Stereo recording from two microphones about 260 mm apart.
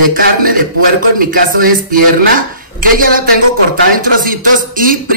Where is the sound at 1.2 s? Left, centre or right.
Right.